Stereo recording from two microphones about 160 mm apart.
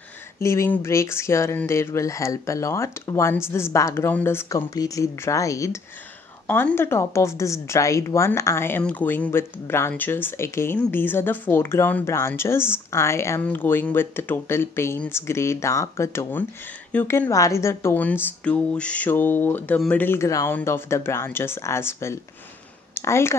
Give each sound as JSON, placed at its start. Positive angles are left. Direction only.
{"t": 0.4, "sound": "a woman's voice", "side_deg": 20}